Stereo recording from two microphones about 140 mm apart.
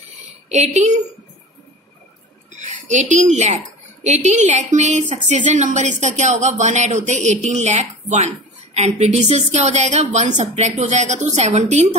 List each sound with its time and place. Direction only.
0.5 s a woman's voice: 55° right (ahead or behind)
2.5 s a woman's voice: 60° right (ahead or behind)